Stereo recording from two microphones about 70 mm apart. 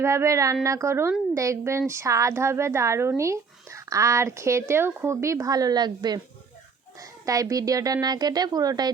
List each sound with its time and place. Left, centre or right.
0.0 s speech: right
5.2 s speech: right
5.5 s a woman's voice: right
7.0 s speech: right
8.0 s speech: right